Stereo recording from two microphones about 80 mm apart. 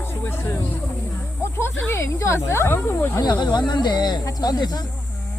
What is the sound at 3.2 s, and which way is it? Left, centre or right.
Speech, left.